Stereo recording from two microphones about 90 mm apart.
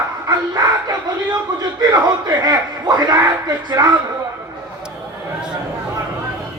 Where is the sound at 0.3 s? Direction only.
40° right (ahead or behind).